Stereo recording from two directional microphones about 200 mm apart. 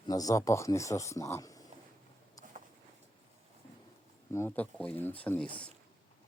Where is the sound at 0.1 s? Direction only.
15° left (ahead or behind).